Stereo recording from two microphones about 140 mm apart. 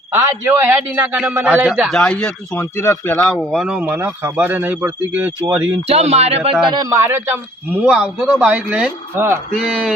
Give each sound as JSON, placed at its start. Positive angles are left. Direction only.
{"t": 0.1, "sound": "speech", "side_deg": -20}
{"t": 2.0, "sound": "speech", "side_deg": 10}
{"t": 3.5, "sound": "speech", "side_deg": 0}
{"t": 3.8, "sound": "speech", "side_deg": -15}
{"t": 5.9, "sound": "a man's voice", "side_deg": -50}
{"t": 6.7, "sound": "speech", "side_deg": -20}
{"t": 9.6, "sound": "speech", "side_deg": -5}